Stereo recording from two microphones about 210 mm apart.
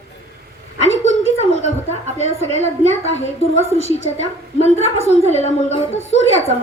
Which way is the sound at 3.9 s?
30° left (ahead or behind).